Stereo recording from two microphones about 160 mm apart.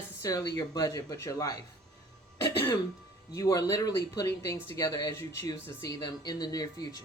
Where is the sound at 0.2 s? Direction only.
20° left (ahead or behind).